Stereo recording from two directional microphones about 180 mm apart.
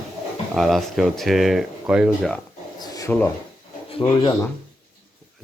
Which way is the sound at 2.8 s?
20° left (ahead or behind).